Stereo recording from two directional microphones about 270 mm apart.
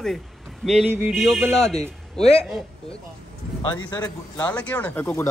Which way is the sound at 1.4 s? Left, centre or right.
Centre.